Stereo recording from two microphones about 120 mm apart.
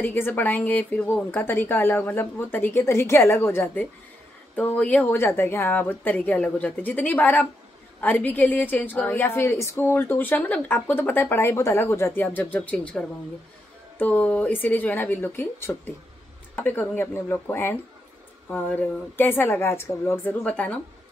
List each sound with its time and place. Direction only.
0.0 s a woman's voice: 15° left (ahead or behind)